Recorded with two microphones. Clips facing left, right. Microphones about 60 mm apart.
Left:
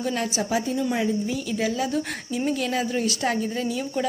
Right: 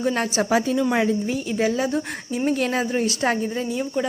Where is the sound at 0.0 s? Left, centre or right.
Right.